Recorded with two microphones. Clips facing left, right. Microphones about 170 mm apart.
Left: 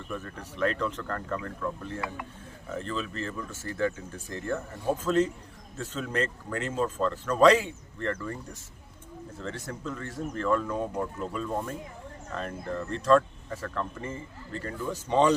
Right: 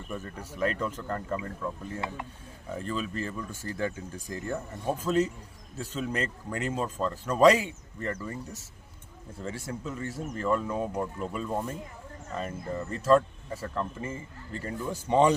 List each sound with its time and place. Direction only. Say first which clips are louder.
0.1 s speech: even; 10° right (ahead or behind)
2.7 s speech: even; 15° right (ahead or behind)